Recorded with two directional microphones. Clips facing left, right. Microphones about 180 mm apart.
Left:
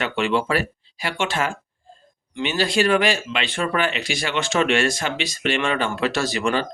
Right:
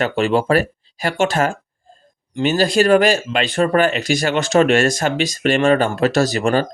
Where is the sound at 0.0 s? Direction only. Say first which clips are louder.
Right 5 dB; 40° right (ahead or behind).